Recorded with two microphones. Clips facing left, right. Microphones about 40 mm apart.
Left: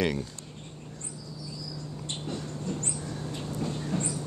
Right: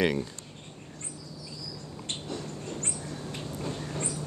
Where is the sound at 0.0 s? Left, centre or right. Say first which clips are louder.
Right 2 dB; centre.